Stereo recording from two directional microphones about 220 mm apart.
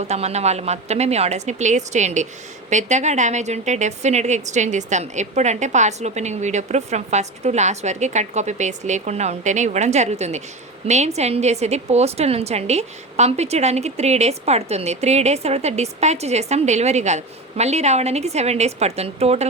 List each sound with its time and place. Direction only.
0.1 s a woman's voice: 30° right (ahead or behind)